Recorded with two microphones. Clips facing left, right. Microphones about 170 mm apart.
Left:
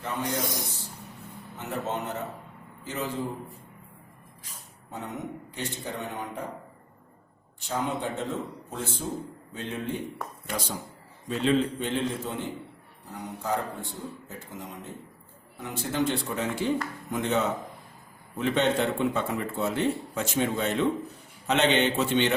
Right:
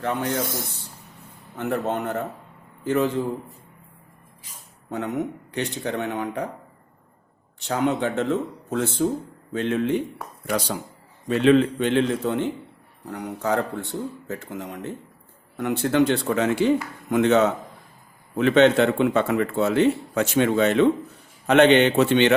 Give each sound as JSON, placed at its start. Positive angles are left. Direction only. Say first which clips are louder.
{"t": 0.2, "sound": "speech", "louder": "right 4 dB", "side_deg": 15}
{"t": 1.5, "sound": "a man's voice", "louder": "right 7 dB", "side_deg": -60}
{"t": 4.9, "sound": "a man's voice", "louder": "right 9 dB", "side_deg": -75}
{"t": 7.6, "sound": "a man's voice", "louder": "right 7 dB", "side_deg": -75}
{"t": 11.3, "sound": "a man's voice", "louder": "right 8 dB", "side_deg": -70}
{"t": 21.4, "sound": "a man's voice", "louder": "right 8 dB", "side_deg": -60}